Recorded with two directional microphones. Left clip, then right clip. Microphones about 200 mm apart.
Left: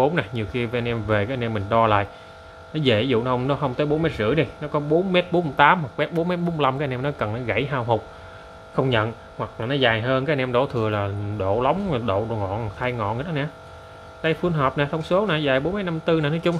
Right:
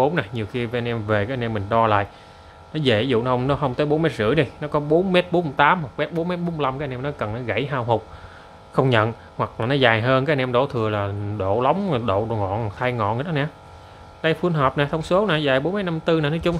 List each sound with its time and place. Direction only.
0.0 s speech: centre (ahead or behind)